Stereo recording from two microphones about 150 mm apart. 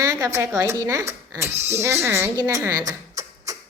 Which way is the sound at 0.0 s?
20° right (ahead or behind).